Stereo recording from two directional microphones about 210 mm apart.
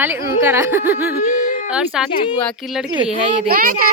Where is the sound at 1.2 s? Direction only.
40° left (ahead or behind).